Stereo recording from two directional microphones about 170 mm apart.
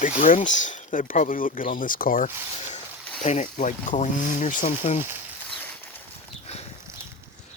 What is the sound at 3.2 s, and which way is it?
Speech, 45° left (ahead or behind).